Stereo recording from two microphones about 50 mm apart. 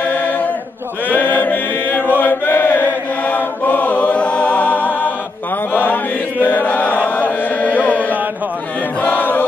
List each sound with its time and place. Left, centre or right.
0.0 s choir: left
1.0 s chant: left